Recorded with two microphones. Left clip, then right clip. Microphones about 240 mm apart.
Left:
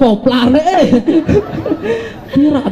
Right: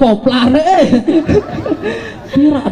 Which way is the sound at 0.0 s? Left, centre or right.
Left.